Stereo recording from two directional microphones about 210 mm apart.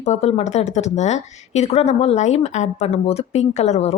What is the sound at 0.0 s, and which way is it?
Speech, 30° left (ahead or behind).